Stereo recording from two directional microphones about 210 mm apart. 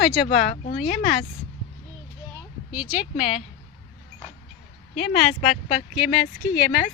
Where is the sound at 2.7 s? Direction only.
5° right (ahead or behind).